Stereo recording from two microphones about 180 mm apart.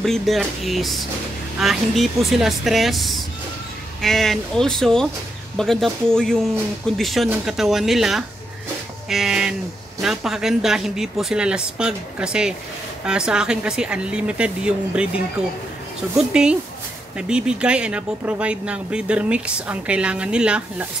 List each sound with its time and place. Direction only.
0.0 s speech: centre (ahead or behind)